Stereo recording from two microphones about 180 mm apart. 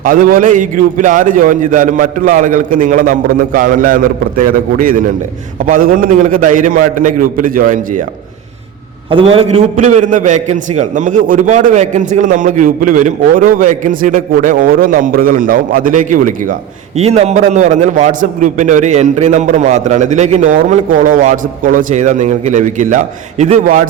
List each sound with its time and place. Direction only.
0.0 s a man's voice: 50° right (ahead or behind)
9.0 s a man's voice: 30° right (ahead or behind)
9.7 s a man's voice: 45° right (ahead or behind)
17.0 s a man's voice: 35° right (ahead or behind)